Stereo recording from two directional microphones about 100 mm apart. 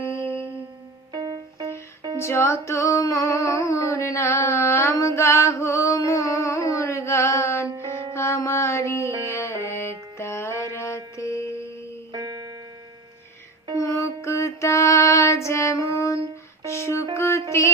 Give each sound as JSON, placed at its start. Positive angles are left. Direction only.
{"t": 0.0, "sound": "music", "side_deg": 25}
{"t": 1.1, "sound": "music", "side_deg": -40}
{"t": 2.1, "sound": "music", "side_deg": 25}
{"t": 6.7, "sound": "a sound", "side_deg": 30}
{"t": 8.1, "sound": "music", "side_deg": 30}
{"t": 12.1, "sound": "music", "side_deg": -45}
{"t": 13.7, "sound": "female singing", "side_deg": 30}
{"t": 16.6, "sound": "music", "side_deg": 30}